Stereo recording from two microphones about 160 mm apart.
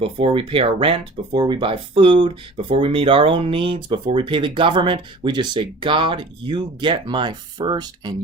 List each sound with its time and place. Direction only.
0.0 s speech: 35° right (ahead or behind)